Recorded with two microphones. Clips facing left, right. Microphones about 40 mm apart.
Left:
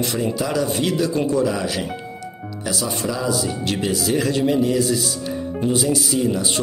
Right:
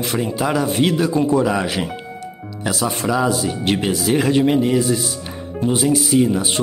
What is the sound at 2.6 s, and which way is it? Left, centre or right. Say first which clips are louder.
Speech: right 4 dB; right.